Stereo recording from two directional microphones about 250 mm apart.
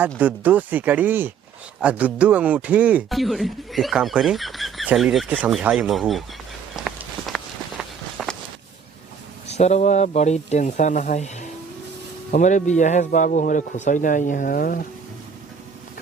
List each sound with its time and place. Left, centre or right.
0.2 s speech: centre
6.7 s walk: centre
9.5 s speech: left